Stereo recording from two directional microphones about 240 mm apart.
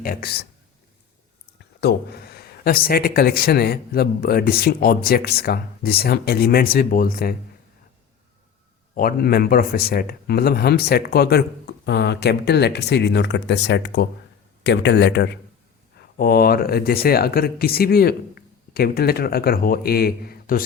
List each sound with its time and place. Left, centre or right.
0.0 s speech: left
1.5 s speech: left
9.0 s speech: left